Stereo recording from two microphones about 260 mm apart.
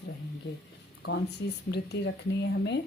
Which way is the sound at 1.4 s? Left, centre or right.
Left.